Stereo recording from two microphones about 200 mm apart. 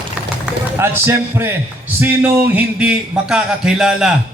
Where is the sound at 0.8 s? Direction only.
10° right (ahead or behind).